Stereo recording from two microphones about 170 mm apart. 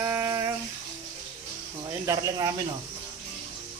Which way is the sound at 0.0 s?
15° right (ahead or behind).